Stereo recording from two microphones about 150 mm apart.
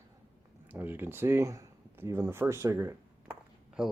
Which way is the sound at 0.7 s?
15° right (ahead or behind).